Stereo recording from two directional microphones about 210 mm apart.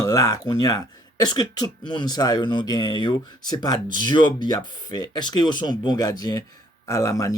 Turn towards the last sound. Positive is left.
turn(degrees=15)  # may be behind; listen again after turning